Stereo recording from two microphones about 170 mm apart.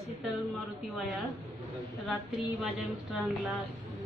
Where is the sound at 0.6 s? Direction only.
Centre (ahead or behind).